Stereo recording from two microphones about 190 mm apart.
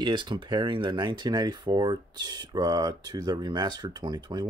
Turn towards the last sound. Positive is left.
turn(degrees=-20)  # may be behind; listen again after turning